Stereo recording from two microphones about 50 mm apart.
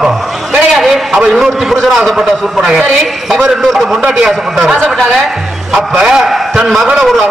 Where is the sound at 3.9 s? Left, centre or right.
Centre.